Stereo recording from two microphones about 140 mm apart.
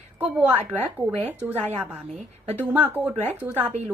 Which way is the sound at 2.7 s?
10° right (ahead or behind).